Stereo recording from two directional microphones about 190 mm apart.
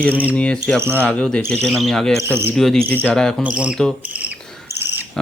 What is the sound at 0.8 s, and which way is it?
Speech, 15° right (ahead or behind).